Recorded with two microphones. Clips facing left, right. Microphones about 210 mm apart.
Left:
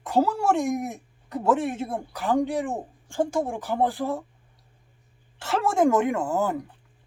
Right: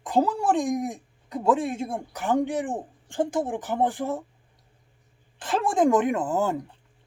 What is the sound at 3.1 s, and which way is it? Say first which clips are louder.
Speech: even; 15° right (ahead or behind).